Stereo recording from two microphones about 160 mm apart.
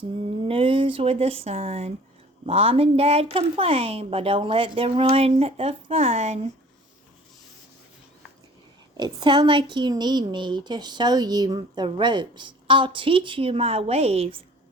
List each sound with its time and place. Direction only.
0.4 s a woman's voice: 35° right (ahead or behind)
9.0 s a woman's voice: 30° right (ahead or behind)